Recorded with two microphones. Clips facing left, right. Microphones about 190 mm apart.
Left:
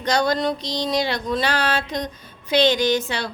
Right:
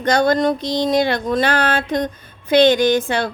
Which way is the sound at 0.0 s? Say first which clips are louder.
Right 5 dB; 55° right (ahead or behind).